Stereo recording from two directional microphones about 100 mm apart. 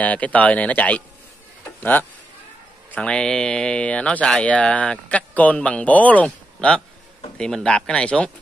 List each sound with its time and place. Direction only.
0.0 s speech: 15° left (ahead or behind)